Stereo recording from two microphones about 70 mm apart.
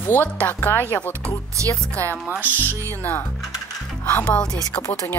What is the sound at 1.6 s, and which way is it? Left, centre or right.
Speech, right.